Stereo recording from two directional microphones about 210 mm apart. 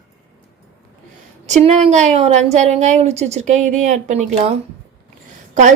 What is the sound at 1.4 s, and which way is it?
A woman's voice, 30° right (ahead or behind).